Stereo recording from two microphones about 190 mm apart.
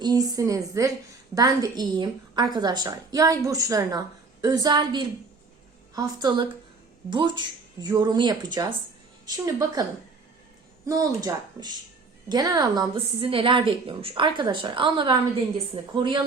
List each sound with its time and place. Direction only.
0.0 s a woman's voice: 20° right (ahead or behind)
10.8 s a woman's voice: 20° right (ahead or behind)